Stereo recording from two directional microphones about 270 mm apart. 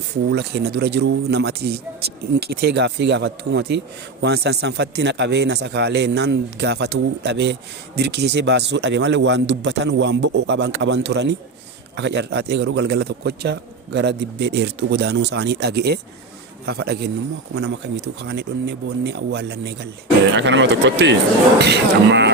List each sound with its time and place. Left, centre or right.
0.3 s a man's voice: right